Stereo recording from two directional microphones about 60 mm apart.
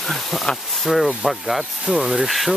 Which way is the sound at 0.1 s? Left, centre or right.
Centre.